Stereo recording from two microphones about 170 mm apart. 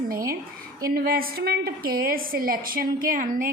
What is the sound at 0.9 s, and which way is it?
A woman's voice, 60° right (ahead or behind).